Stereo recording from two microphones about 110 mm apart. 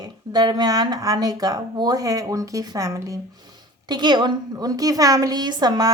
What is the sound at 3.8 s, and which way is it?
Speech, 40° right (ahead or behind).